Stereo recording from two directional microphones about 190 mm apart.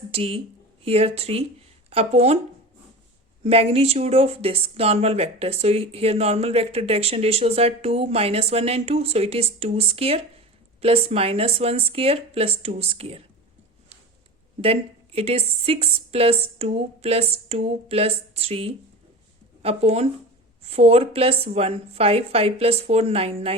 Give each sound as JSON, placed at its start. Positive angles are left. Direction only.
{"t": 0.1, "sound": "speech", "side_deg": -30}
{"t": 3.4, "sound": "speech", "side_deg": -30}
{"t": 14.6, "sound": "speech", "side_deg": -30}